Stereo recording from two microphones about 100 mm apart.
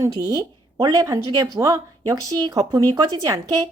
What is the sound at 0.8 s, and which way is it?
A woman's voice, 45° right (ahead or behind).